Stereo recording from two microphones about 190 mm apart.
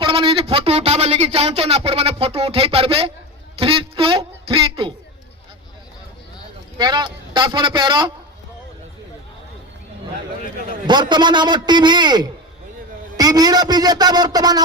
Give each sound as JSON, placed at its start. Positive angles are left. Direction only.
{"t": 0.0, "sound": "a man's voice", "side_deg": -25}
{"t": 6.7, "sound": "a man's voice", "side_deg": -20}
{"t": 10.8, "sound": "a man's voice", "side_deg": -25}